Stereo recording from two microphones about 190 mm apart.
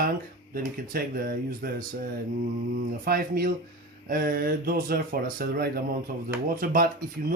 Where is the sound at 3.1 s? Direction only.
50° right (ahead or behind).